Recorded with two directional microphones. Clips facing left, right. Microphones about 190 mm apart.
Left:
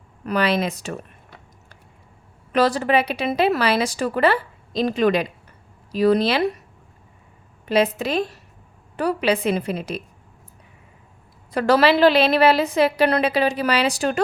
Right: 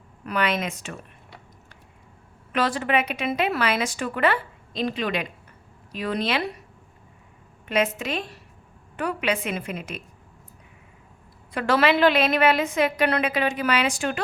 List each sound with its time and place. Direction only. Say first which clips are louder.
0.3 s speech: left 5 dB; 35° left (ahead or behind)
2.5 s speech: left 5 dB; 40° left (ahead or behind)
7.7 s speech: left 5 dB; 35° left (ahead or behind)
11.5 s speech: left 4 dB; 40° left (ahead or behind)